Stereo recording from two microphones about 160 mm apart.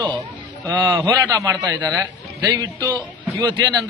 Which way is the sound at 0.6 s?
20° right (ahead or behind).